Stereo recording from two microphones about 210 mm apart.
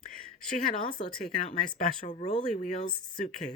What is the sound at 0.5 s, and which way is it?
Speech, 40° left (ahead or behind).